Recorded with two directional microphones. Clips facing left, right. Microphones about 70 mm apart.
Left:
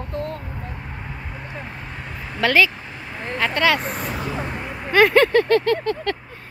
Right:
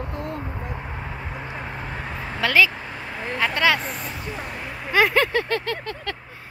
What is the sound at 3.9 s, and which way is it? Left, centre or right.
Speech, left.